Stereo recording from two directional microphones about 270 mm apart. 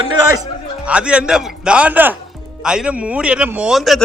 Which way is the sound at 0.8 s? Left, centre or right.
Centre.